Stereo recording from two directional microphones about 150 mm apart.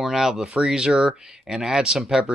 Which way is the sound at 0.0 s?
5° right (ahead or behind).